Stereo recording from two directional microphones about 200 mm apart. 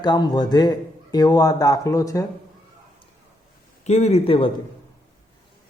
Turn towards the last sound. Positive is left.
turn(degrees=25)  # may be behind; listen again after turning